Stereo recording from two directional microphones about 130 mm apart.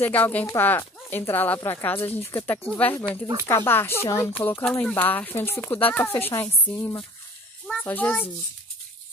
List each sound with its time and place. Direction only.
0.0 s speech: 15° left (ahead or behind)